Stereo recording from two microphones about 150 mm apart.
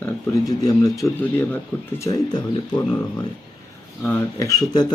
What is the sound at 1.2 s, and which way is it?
Speech, 15° left (ahead or behind).